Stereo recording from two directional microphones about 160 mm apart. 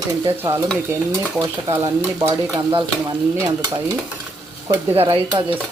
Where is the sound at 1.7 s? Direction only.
20° right (ahead or behind).